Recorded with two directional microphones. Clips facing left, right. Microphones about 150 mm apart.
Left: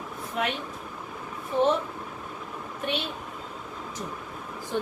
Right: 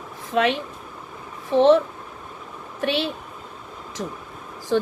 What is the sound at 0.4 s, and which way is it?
A woman's voice, 90° right.